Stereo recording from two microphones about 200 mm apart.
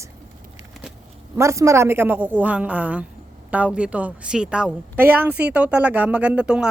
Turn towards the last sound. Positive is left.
turn(degrees=-5)  # may be behind; listen again after turning